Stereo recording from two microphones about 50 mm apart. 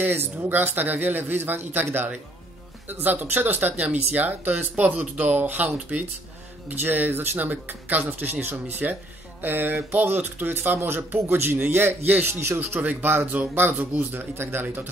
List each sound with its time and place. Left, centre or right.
0.0 s speech: right
12.3 s speech: right
12.5 s speech: right